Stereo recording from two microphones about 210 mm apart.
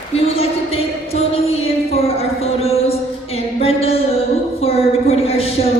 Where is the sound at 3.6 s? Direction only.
30° left (ahead or behind).